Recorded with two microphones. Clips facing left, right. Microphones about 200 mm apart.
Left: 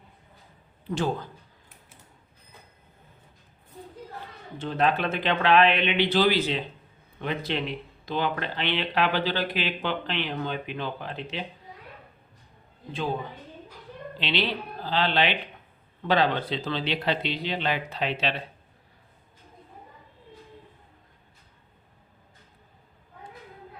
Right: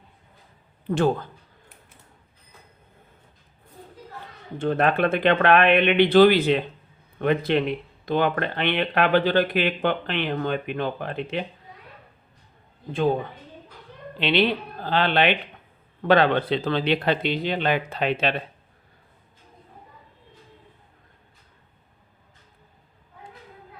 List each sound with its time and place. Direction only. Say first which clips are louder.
0.9 s speech: right 6 dB; 55° right (ahead or behind)
4.5 s speech: right 4 dB; 55° right (ahead or behind)
14.2 s speech: right 7 dB; 55° right (ahead or behind)